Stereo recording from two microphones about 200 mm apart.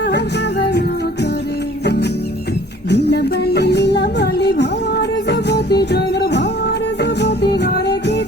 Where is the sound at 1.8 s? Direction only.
55° left (ahead or behind).